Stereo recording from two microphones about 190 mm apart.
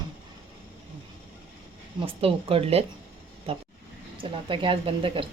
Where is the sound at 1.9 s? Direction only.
30° right (ahead or behind).